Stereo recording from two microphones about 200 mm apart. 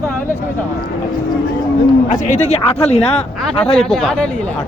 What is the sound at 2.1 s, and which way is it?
Speech, 40° left (ahead or behind).